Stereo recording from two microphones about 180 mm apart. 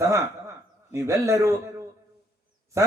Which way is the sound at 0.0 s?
15° right (ahead or behind).